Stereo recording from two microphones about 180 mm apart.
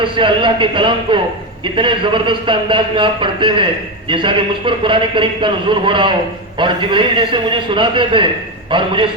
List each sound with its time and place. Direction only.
0.0 s a man's voice: 25° right (ahead or behind)